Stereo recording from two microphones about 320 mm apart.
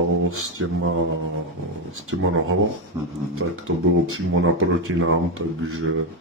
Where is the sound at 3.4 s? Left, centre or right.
Right.